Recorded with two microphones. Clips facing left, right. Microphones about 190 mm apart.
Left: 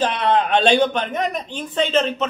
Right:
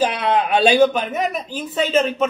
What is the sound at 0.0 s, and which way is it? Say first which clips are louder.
A man's voice: even; 10° right (ahead or behind).